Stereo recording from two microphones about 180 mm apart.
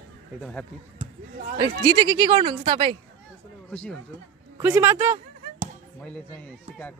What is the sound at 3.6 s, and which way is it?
Speech, 5° left (ahead or behind).